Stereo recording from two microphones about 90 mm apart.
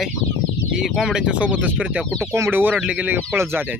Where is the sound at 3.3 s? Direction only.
30° right (ahead or behind).